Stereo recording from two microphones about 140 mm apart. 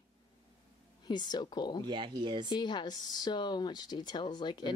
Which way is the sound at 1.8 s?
30° right (ahead or behind).